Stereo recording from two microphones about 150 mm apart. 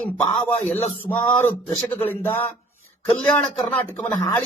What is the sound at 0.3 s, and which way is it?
A man's voice, 10° left (ahead or behind).